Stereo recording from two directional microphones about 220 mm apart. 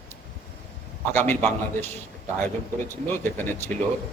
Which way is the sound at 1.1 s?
10° left (ahead or behind).